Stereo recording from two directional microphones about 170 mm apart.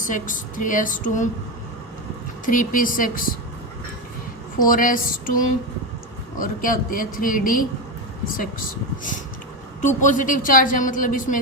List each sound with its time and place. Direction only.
0.0 s a woman's voice: 50° left (ahead or behind)
2.5 s a woman's voice: 50° left (ahead or behind)
4.5 s a woman's voice: 55° left (ahead or behind)
9.8 s a woman's voice: 50° left (ahead or behind)